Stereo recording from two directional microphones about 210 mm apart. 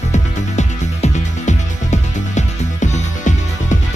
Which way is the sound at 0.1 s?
35° left (ahead or behind).